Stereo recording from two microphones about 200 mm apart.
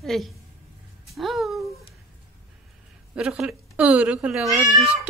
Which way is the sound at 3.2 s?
5° right (ahead or behind).